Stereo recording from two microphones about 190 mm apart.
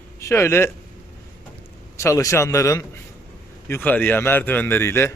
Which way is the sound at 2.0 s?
15° left (ahead or behind).